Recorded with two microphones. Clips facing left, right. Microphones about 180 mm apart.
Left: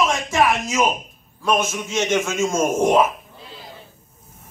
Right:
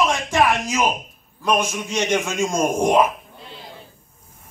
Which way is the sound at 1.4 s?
15° right (ahead or behind).